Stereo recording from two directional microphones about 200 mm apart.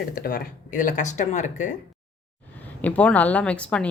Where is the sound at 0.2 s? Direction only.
50° left (ahead or behind).